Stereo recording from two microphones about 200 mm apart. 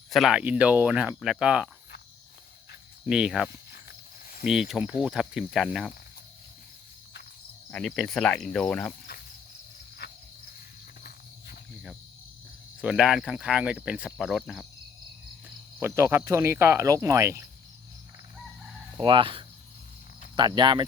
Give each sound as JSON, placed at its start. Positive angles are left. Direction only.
{"t": 0.1, "sound": "cricket", "side_deg": 0}
{"t": 3.1, "sound": "cricket", "side_deg": -5}
{"t": 3.7, "sound": "cricket", "side_deg": 50}
{"t": 4.4, "sound": "cricket", "side_deg": 0}
{"t": 7.7, "sound": "cricket", "side_deg": 5}
{"t": 10.0, "sound": "cricket", "side_deg": 55}
{"t": 12.8, "sound": "cricket", "side_deg": -5}
{"t": 15.8, "sound": "speech", "side_deg": -15}
{"t": 18.9, "sound": "speech", "side_deg": -25}